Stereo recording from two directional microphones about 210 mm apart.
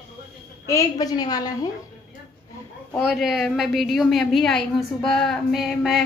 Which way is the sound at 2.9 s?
Centre (ahead or behind).